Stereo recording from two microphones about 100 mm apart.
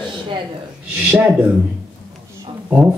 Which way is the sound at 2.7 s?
15° right (ahead or behind).